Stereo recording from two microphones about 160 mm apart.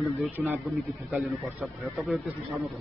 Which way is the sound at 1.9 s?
Centre (ahead or behind).